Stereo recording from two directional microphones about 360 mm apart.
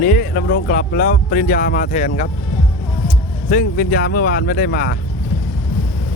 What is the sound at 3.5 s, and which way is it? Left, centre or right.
Speech, left.